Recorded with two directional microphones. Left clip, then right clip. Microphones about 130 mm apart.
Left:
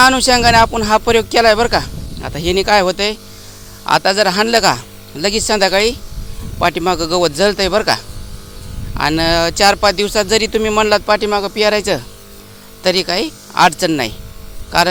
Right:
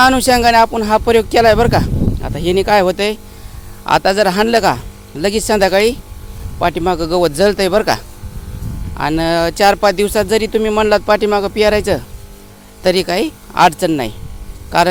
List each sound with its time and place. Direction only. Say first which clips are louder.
0.0 s speech: even; 40° right (ahead or behind)
2.2 s speech: even; 30° right (ahead or behind); by 6.0 s 45° right (ahead or behind)
6.6 s speech: even; 20° right (ahead or behind); by 8.0 s 40° right (ahead or behind)
9.0 s speech: left 1 dB; 20° right (ahead or behind); by 10.2 s 45° right (ahead or behind)
10.2 s speech: even; 30° right (ahead or behind)
14.7 s speech: right 1 dB; 45° right (ahead or behind)